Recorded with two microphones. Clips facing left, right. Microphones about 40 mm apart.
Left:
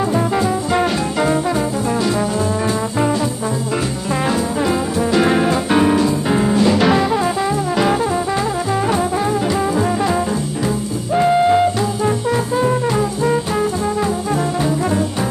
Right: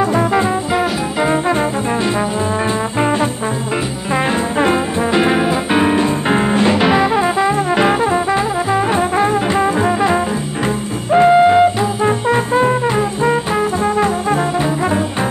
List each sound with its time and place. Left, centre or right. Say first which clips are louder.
0.3 s music: right 2 dB; right
3.0 s trombone: right 3 dB; right
4.1 s music: right 3 dB; right
4.6 s brass instrument: right 3 dB; right
5.2 s music: right 1 dB; centre
6.0 s music: right 1 dB; right
6.8 s music: right 2 dB; right
9.1 s brass instrument: right 3 dB; right
11.1 s music: right 4 dB; right